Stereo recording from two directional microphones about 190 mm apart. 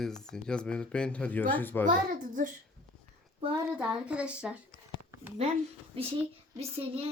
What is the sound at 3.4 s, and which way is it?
Speech, 30° right (ahead or behind).